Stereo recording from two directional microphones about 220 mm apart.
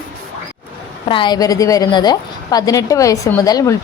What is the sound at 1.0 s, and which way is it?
A woman's voice, 20° left (ahead or behind).